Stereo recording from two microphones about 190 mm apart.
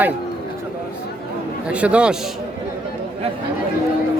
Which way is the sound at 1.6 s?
5° right (ahead or behind).